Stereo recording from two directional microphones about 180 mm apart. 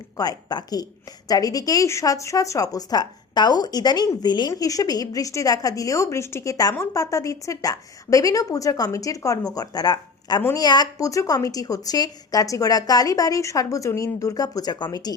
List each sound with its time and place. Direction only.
0.2 s speech: 20° left (ahead or behind)